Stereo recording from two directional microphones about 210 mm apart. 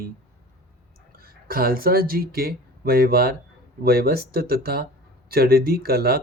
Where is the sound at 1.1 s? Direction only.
45° right (ahead or behind).